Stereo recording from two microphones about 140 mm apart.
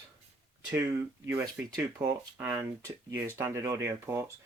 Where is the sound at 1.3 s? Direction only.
15° right (ahead or behind).